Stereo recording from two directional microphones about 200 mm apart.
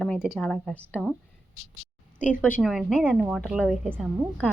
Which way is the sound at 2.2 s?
40° left (ahead or behind).